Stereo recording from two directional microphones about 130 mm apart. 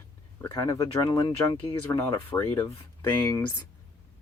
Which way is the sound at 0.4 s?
25° left (ahead or behind).